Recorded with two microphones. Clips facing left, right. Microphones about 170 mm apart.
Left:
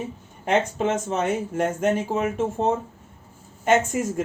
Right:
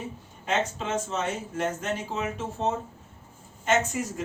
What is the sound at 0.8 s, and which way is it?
A man's voice, 50° left (ahead or behind).